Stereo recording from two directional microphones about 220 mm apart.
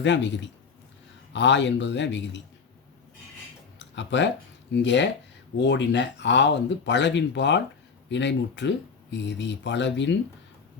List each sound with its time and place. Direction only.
0.0 s a man's voice: 55° left (ahead or behind)
3.8 s a sound: 55° left (ahead or behind)
4.7 s speech: 50° left (ahead or behind)